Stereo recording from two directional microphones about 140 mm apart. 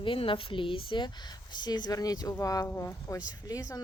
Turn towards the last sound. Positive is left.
turn(degrees=25)  # may be behind; listen again after turning